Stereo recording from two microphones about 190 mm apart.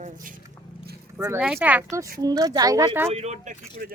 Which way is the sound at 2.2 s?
20° right (ahead or behind).